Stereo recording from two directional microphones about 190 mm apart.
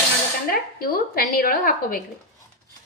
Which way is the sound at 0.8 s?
50° left (ahead or behind).